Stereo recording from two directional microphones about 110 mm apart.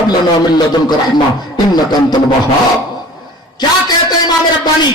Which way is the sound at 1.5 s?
40° left (ahead or behind).